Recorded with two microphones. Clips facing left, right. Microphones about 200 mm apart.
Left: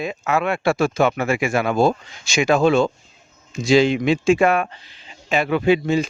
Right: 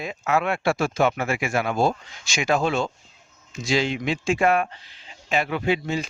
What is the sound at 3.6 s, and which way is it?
Speech, 70° left (ahead or behind).